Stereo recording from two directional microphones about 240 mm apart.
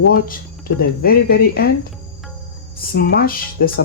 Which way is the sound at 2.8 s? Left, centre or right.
Left.